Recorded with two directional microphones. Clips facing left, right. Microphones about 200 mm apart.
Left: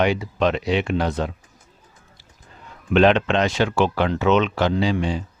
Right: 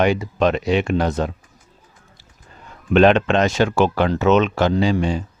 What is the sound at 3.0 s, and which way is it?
Speech, 45° right (ahead or behind).